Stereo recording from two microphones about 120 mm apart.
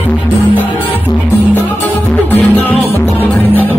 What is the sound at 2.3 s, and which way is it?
Music, 15° left (ahead or behind).